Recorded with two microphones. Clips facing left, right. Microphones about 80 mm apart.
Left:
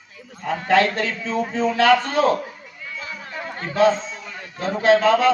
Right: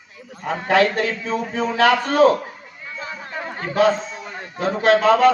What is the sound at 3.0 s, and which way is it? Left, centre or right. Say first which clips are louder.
Chatter: right 3 dB; right.